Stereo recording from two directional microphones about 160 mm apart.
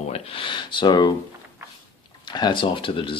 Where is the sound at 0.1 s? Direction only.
35° left (ahead or behind).